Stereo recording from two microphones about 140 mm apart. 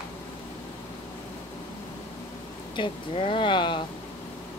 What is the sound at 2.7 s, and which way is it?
Speech, 35° left (ahead or behind).